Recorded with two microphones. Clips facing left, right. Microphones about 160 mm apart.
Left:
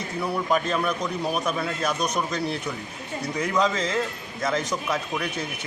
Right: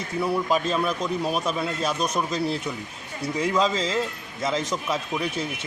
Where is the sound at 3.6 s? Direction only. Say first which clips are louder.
Left 2 dB; 30° right (ahead or behind).